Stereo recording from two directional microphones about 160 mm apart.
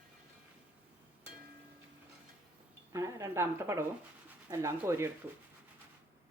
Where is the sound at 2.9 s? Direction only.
20° right (ahead or behind).